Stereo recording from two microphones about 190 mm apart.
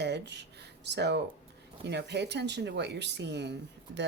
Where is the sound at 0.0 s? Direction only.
65° right (ahead or behind).